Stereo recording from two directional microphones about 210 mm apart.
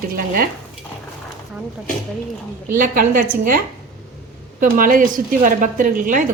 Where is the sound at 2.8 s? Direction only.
40° right (ahead or behind).